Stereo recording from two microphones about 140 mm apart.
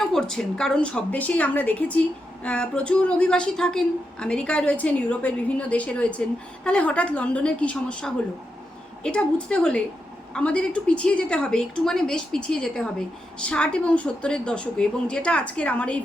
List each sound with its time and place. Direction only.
0.0 s a woman's voice: 5° left (ahead or behind)